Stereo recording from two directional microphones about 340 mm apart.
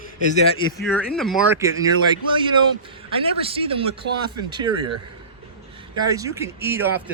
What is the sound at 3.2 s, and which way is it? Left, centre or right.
Speech, centre.